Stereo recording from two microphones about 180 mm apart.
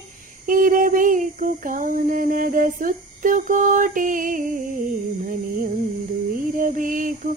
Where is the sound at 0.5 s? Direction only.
50° right (ahead or behind).